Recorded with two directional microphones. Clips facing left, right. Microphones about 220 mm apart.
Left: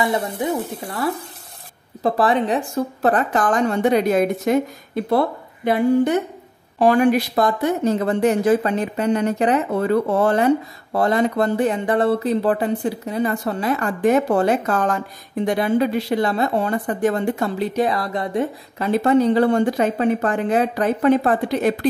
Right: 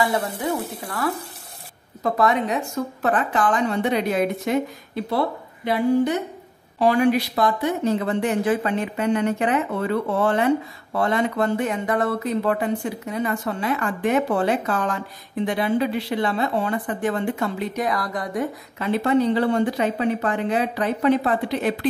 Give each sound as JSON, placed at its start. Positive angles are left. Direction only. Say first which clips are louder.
{"t": 0.0, "sound": "speech", "louder": "left 2 dB", "side_deg": 25}
{"t": 6.8, "sound": "speech", "louder": "left 3 dB", "side_deg": 50}
{"t": 18.9, "sound": "speech", "louder": "left 3 dB", "side_deg": 45}